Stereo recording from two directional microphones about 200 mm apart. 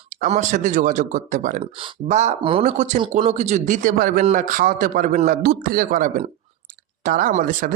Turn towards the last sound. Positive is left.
turn(degrees=-45)  # may be behind; listen again after turning